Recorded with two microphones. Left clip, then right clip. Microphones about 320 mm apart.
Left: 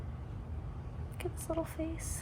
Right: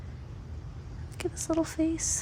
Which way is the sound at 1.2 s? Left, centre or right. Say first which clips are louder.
Right 8 dB; right.